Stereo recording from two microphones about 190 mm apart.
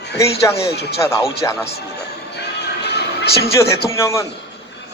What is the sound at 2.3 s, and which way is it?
Music, 60° left (ahead or behind).